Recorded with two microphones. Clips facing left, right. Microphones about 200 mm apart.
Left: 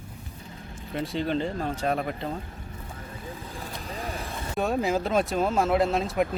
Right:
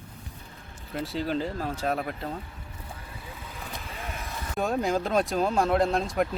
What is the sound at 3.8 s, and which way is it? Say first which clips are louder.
Vehicle: left 4 dB; 35° left (ahead or behind).